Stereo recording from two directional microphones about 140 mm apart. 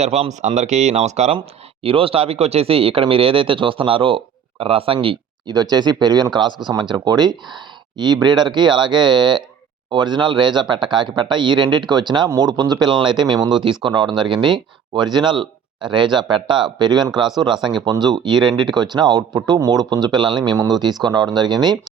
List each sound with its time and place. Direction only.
0.0 s speech: 50° right (ahead or behind)
1.8 s speech: 40° right (ahead or behind)